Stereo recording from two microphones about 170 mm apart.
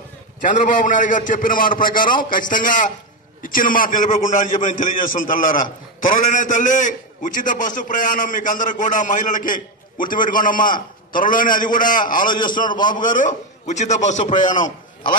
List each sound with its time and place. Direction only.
0.4 s a man's voice: 50° left (ahead or behind)